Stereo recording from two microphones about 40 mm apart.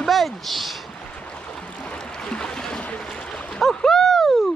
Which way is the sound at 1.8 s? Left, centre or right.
Left.